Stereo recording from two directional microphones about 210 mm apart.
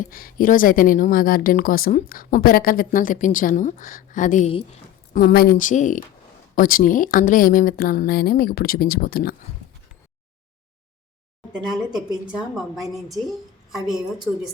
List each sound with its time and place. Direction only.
0.0 s speech: 40° left (ahead or behind)
5.1 s speech: 45° left (ahead or behind)
11.9 s a woman's voice: centre (ahead or behind)